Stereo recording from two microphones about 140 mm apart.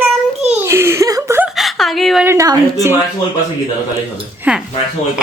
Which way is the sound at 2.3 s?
25° right (ahead or behind).